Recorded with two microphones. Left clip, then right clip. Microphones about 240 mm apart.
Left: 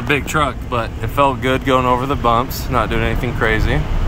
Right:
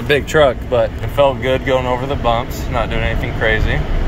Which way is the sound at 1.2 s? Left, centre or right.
Centre.